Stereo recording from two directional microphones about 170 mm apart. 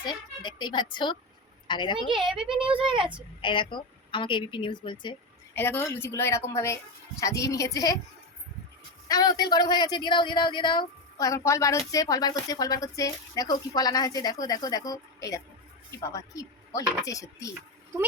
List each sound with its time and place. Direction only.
0.0 s a sound: 25° left (ahead or behind)
1.6 s a woman's voice: 25° left (ahead or behind)
2.2 s a child's voice: 5° right (ahead or behind)
2.6 s speech: 30° right (ahead or behind)
3.4 s speech: 30° left (ahead or behind)
5.5 s a woman's voice: 10° left (ahead or behind)
9.0 s speech: 25° left (ahead or behind)